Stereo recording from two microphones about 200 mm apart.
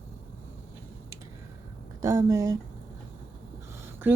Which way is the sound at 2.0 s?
15° right (ahead or behind).